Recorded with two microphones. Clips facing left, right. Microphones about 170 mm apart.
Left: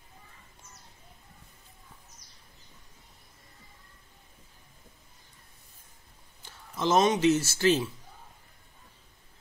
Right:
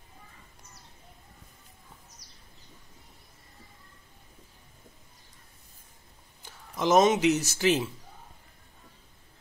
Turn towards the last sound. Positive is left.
turn(degrees=-15)  # may be behind; listen again after turning